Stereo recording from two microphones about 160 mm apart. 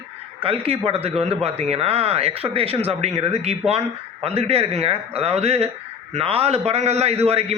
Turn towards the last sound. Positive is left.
turn(degrees=-40)  # may be behind; listen again after turning